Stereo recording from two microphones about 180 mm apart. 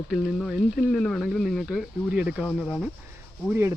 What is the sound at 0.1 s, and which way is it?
Speech, centre (ahead or behind).